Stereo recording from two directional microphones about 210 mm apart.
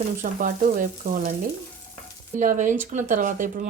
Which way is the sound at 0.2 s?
40° right (ahead or behind).